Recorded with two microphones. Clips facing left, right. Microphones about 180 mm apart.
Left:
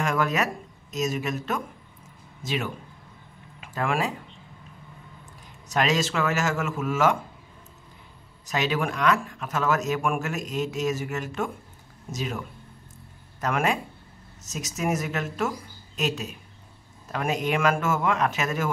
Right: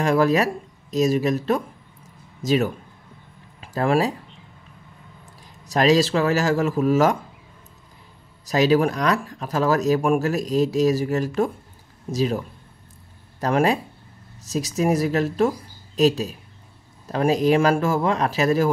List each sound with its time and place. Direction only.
0.0 s speech: 35° right (ahead or behind)
5.7 s speech: 35° right (ahead or behind)
8.5 s speech: 35° right (ahead or behind)